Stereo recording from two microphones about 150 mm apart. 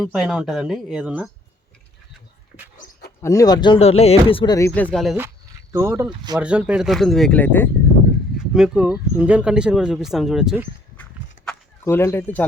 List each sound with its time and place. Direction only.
0.0 s speech: 5° right (ahead or behind)
3.2 s speech: 20° left (ahead or behind); by 4.5 s 35° left (ahead or behind)
4.7 s speech: 10° left (ahead or behind)
5.7 s speech: 20° right (ahead or behind)
6.4 s speech: 5° right (ahead or behind); by 7.7 s 15° left (ahead or behind)
8.5 s speech: 5° right (ahead or behind)
11.4 s a sound: 15° left (ahead or behind)